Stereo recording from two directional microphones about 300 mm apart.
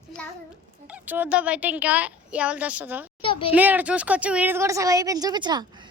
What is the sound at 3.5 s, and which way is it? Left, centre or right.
Speech, centre.